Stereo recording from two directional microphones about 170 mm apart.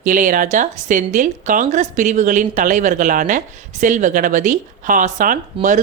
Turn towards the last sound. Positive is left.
turn(degrees=-50)  # may be behind; listen again after turning